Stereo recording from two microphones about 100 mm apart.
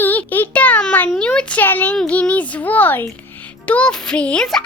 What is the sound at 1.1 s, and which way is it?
A child's voice, 10° left (ahead or behind).